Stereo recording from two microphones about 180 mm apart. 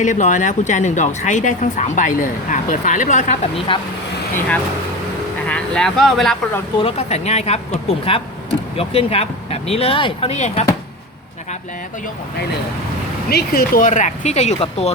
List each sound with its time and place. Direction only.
0.0 s speech: 45° left (ahead or behind)
5.5 s speech: 5° left (ahead or behind)
6.7 s speech: 35° left (ahead or behind)
13.3 s speech: 55° left (ahead or behind); by 14.9 s 35° left (ahead or behind)